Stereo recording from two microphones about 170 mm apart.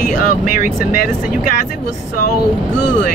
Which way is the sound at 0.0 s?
55° left (ahead or behind).